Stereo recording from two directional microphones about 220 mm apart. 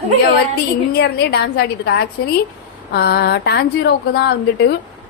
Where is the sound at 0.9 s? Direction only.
50° left (ahead or behind).